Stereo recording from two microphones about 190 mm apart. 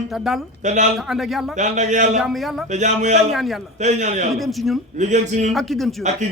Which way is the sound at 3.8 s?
35° right (ahead or behind).